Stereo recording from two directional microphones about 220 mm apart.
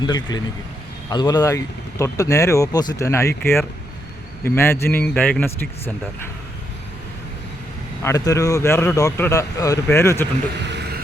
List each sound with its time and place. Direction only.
0.0 s a man's voice: 20° left (ahead or behind)
4.4 s a man's voice: 10° left (ahead or behind)
8.0 s a man's voice: 15° left (ahead or behind)